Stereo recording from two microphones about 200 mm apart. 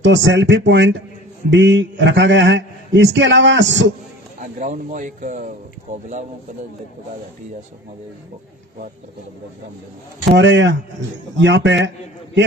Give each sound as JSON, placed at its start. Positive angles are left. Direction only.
{"t": 0.0, "sound": "a man's voice", "side_deg": -65}
{"t": 4.4, "sound": "speech", "side_deg": -40}
{"t": 10.3, "sound": "a man's voice", "side_deg": -65}